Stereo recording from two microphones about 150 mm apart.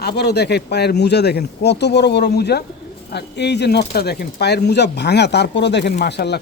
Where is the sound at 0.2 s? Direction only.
90° left.